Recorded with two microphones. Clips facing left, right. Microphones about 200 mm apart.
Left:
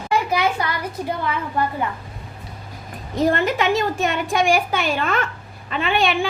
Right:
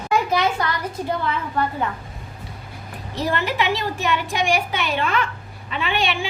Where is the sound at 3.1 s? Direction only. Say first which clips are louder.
Left 5 dB; 50° left (ahead or behind).